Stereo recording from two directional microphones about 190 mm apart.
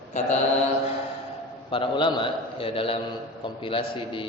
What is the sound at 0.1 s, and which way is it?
Speech, 40° left (ahead or behind).